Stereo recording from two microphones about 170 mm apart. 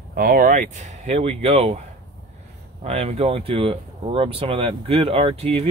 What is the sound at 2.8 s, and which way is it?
Speech, 40° right (ahead or behind).